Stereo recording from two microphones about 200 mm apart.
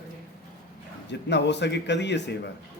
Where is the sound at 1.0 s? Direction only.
60° left (ahead or behind).